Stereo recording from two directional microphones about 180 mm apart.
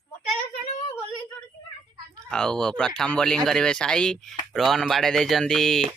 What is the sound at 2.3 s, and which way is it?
Speech, 5° left (ahead or behind).